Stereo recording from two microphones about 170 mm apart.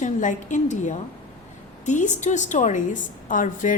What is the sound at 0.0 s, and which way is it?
A woman's voice, 45° left (ahead or behind).